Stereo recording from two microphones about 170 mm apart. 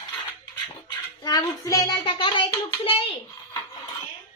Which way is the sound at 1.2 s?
25° left (ahead or behind).